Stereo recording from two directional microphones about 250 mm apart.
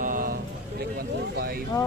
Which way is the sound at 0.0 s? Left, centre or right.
Right.